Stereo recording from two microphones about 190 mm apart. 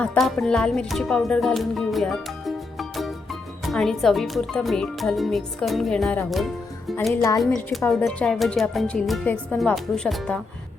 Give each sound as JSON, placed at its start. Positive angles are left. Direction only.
{"t": 0.0, "sound": "speech", "side_deg": 5}
{"t": 3.7, "sound": "speech", "side_deg": 0}
{"t": 7.1, "sound": "speech", "side_deg": 15}
{"t": 7.3, "sound": "speech", "side_deg": 0}